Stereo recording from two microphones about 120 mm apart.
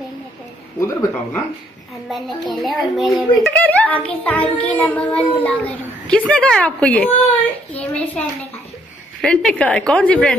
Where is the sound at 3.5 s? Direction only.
15° left (ahead or behind).